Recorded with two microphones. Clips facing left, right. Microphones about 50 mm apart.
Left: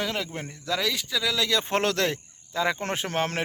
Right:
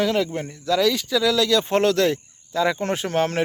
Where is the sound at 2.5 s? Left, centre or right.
Left.